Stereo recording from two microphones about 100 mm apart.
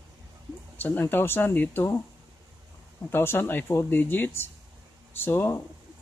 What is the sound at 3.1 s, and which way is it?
Speech, 25° left (ahead or behind).